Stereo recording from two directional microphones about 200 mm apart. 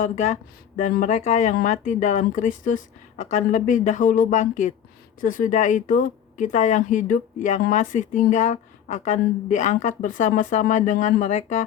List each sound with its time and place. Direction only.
0.0 s speech: 35° left (ahead or behind)